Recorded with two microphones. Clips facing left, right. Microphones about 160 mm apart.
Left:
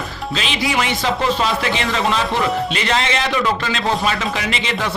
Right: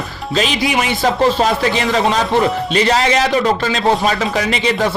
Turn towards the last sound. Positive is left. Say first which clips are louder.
# right 6 dB
turn(degrees=-40)  # may be behind; listen again after turning